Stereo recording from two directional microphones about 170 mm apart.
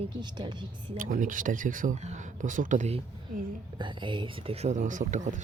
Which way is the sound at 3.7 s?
30° right (ahead or behind).